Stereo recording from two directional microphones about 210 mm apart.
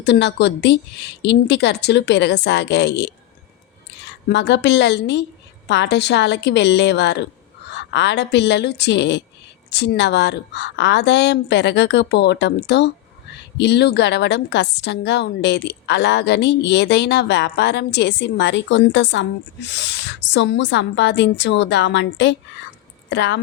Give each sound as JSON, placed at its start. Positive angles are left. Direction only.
{"t": 0.0, "sound": "a woman's voice", "side_deg": 55}